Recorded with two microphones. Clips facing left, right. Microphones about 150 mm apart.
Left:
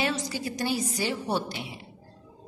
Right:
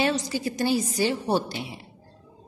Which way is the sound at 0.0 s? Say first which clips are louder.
Right 4 dB; 30° right (ahead or behind).